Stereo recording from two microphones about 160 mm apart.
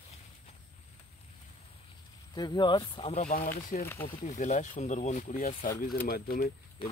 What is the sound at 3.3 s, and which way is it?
Speech, 65° left (ahead or behind).